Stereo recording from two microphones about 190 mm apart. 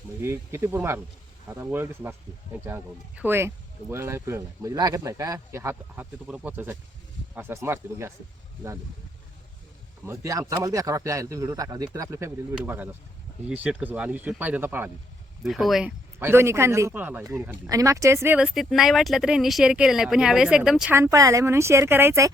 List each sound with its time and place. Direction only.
0.2 s speech: 10° right (ahead or behind)
10.1 s speech: 15° right (ahead or behind); by 15.9 s centre (ahead or behind)
16.2 s speech: 15° right (ahead or behind)